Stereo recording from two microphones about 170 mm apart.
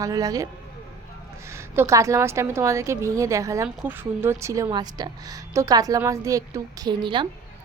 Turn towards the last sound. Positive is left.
turn(degrees=-30)  # may be behind; listen again after turning